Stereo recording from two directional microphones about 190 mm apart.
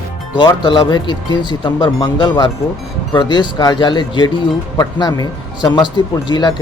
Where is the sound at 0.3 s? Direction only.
25° left (ahead or behind).